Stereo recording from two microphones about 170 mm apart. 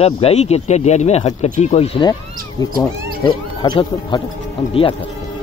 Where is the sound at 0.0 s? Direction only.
35° left (ahead or behind).